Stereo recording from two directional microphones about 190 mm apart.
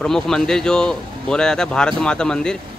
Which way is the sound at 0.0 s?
5° left (ahead or behind).